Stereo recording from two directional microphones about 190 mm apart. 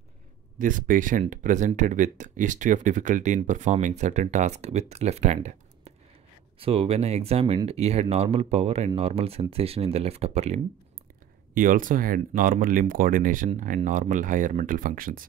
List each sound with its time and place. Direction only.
0.6 s speech: 45° right (ahead or behind)
11.5 s speech: 45° right (ahead or behind)